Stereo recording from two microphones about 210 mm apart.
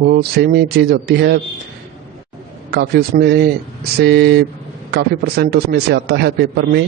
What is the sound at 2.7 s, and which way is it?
A man's voice, 50° right (ahead or behind).